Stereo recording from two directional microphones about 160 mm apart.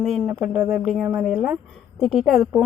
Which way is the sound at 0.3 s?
5° right (ahead or behind).